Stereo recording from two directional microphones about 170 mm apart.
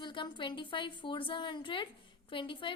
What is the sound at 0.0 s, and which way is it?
A woman's voice, 30° left (ahead or behind).